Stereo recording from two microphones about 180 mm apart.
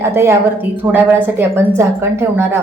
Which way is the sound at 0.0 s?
15° right (ahead or behind).